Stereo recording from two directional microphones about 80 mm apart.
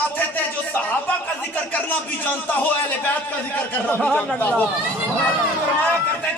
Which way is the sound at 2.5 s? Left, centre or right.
Left.